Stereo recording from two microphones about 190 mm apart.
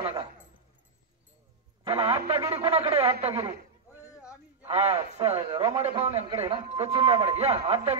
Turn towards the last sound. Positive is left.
turn(degrees=-30)  # may be behind; listen again after turning